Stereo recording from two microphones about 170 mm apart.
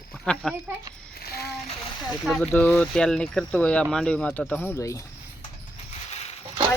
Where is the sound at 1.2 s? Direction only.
70° left (ahead or behind).